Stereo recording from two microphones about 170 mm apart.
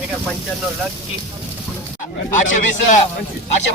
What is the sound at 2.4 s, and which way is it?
Speech, 45° left (ahead or behind).